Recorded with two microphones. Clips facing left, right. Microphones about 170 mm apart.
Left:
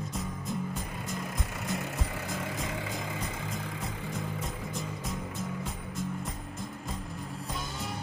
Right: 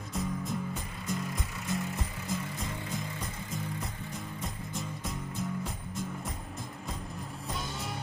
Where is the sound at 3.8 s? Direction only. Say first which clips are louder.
Left 3 dB; centre (ahead or behind).